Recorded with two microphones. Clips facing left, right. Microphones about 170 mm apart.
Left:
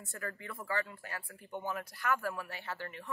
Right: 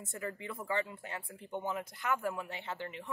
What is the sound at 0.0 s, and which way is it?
A woman's voice, 20° right (ahead or behind).